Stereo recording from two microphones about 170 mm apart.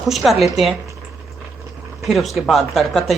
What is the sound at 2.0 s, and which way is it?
Speech, centre (ahead or behind).